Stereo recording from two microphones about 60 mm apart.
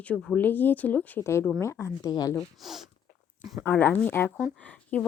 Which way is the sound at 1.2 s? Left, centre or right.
Left.